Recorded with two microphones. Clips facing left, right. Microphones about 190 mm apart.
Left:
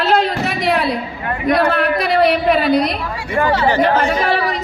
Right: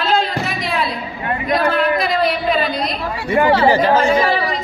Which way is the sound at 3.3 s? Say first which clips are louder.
Right 2 dB; 30° right (ahead or behind).